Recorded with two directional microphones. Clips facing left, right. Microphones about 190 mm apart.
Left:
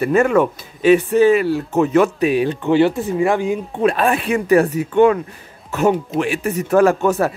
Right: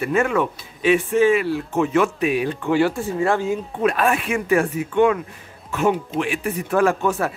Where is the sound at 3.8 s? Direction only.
30° left (ahead or behind).